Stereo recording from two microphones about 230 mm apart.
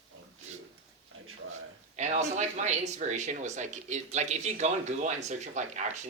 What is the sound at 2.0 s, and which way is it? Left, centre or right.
Speech, right.